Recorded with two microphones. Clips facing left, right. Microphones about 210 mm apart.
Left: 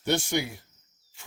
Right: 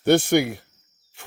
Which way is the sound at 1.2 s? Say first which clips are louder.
Right 11 dB; 60° right (ahead or behind).